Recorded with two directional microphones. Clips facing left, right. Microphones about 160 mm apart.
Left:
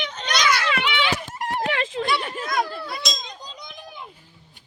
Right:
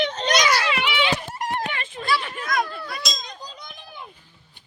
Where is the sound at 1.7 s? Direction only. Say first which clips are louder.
Left 7 dB; 90° left.